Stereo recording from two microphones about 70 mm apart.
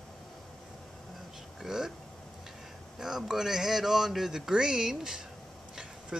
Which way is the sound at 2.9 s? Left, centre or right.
Centre.